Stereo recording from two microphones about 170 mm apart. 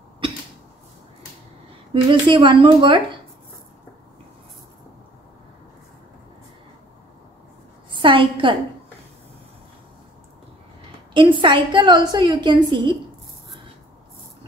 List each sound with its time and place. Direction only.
2.0 s a woman's voice: 30° right (ahead or behind)
7.9 s a sound: 30° right (ahead or behind)
11.1 s a woman's voice: 30° right (ahead or behind)